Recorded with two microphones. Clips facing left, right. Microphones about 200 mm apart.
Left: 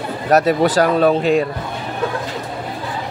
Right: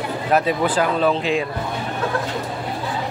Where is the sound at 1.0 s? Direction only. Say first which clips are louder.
Left 5 dB; 45° left (ahead or behind).